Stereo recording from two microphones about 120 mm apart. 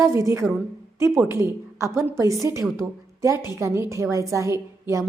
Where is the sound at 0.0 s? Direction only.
25° right (ahead or behind).